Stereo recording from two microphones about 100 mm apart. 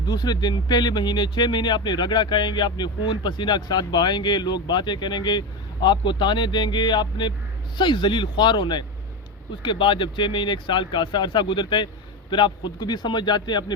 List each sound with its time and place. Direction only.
0.0 s speech: 45° left (ahead or behind)